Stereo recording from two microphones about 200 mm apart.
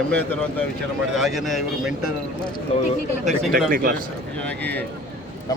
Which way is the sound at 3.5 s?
45° right (ahead or behind).